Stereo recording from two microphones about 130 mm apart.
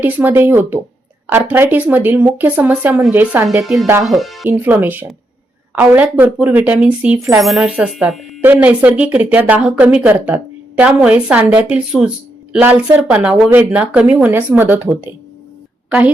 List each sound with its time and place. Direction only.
0.0 s speech: 15° right (ahead or behind)
3.6 s speech: centre (ahead or behind)
4.4 s speech: 15° right (ahead or behind)